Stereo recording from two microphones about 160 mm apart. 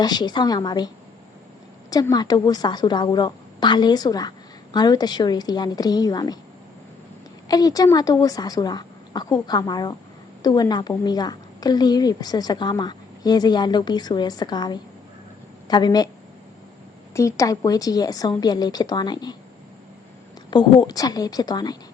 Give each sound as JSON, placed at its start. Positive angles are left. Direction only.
{"t": 0.0, "sound": "a woman's voice", "side_deg": 25}
{"t": 1.9, "sound": "a woman's voice", "side_deg": 25}
{"t": 7.4, "sound": "a woman's voice", "side_deg": 25}
{"t": 17.2, "sound": "a woman's voice", "side_deg": 20}
{"t": 20.5, "sound": "a woman's voice", "side_deg": 30}